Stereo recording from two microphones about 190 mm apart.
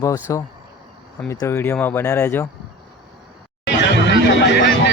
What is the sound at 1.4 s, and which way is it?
Speech, 10° left (ahead or behind).